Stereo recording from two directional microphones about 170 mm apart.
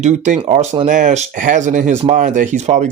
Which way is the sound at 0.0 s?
45° right (ahead or behind).